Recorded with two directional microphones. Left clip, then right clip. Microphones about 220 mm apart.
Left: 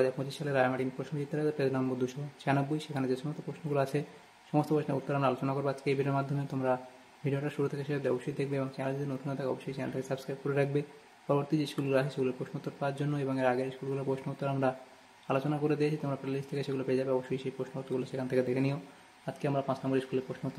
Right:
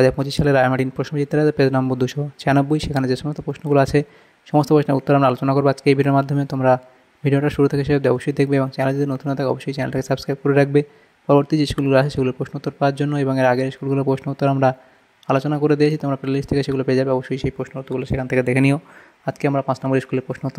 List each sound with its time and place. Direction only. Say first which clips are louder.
0.0 s speech: right 14 dB; 40° right (ahead or behind)